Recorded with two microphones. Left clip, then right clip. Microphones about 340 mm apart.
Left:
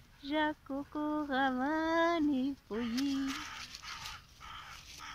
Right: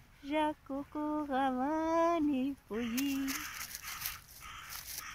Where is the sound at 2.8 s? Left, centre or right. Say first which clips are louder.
Even; centre.